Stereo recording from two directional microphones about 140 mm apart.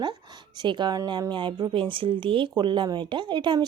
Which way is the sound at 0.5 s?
35° right (ahead or behind).